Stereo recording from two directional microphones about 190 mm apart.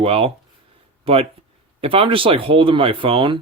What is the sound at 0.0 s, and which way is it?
Speech, 30° right (ahead or behind).